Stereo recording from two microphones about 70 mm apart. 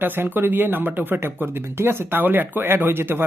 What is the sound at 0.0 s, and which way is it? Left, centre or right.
Speech, right.